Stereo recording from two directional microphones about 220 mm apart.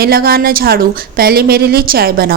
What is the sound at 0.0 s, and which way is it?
A woman's voice, 45° right (ahead or behind).